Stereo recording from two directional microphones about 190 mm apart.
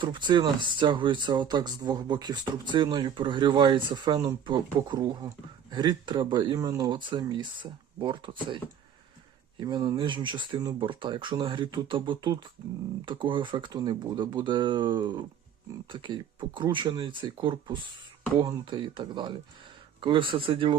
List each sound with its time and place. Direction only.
0.0 s speech: 25° right (ahead or behind)
9.6 s speech: 25° right (ahead or behind)